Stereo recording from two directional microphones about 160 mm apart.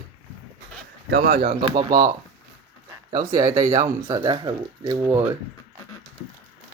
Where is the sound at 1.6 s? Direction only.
25° right (ahead or behind).